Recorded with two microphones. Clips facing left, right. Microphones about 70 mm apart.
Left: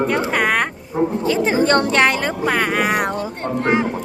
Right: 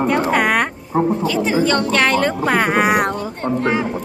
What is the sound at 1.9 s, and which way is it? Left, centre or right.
Speech, centre.